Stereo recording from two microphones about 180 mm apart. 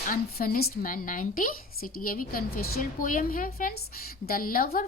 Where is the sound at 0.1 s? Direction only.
55° left (ahead or behind).